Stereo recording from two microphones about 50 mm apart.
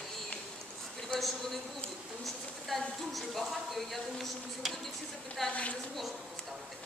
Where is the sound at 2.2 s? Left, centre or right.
Centre.